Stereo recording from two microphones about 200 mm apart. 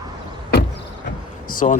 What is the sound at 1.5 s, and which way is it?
Speech, 40° left (ahead or behind).